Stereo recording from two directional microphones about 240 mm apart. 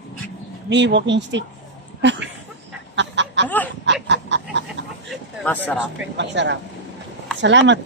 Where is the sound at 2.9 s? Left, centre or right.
Right.